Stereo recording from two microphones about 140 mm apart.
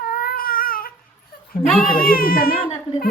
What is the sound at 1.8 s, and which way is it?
Speech, 90° left.